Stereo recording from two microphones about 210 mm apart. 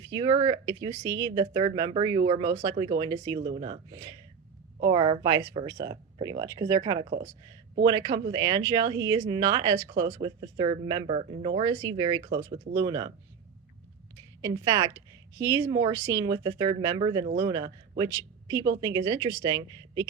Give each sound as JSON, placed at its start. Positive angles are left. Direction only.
{"t": 0.1, "sound": "speech", "side_deg": -20}
{"t": 11.6, "sound": "a woman's voice", "side_deg": -15}
{"t": 14.4, "sound": "a woman's voice", "side_deg": -15}